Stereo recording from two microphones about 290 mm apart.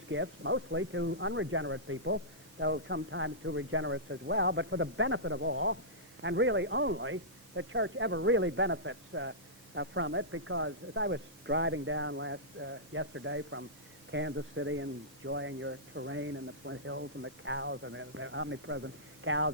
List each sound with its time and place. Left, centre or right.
0.1 s speech: right